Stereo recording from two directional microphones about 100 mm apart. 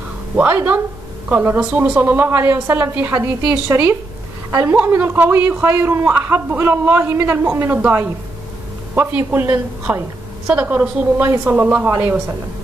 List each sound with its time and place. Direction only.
0.4 s a woman's voice: 15° right (ahead or behind)